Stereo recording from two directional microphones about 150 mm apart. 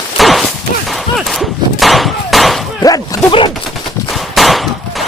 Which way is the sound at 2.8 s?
25° left (ahead or behind).